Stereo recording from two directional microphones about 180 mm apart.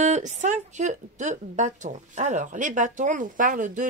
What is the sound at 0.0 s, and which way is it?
A woman's voice, 40° right (ahead or behind).